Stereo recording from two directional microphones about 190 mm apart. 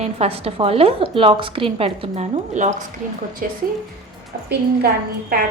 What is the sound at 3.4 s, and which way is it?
Speech, 45° right (ahead or behind).